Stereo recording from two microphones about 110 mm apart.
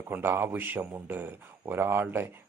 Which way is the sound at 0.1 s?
20° right (ahead or behind).